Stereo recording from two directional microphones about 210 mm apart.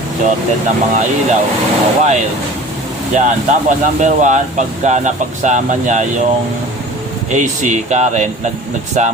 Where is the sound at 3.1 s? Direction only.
35° right (ahead or behind).